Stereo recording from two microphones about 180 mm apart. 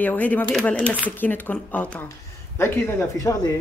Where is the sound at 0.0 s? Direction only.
10° left (ahead or behind).